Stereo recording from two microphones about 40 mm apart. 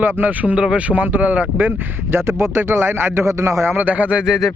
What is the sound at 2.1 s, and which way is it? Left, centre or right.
Speech, right.